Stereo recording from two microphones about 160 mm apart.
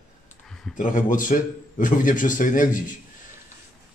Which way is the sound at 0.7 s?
55° left (ahead or behind).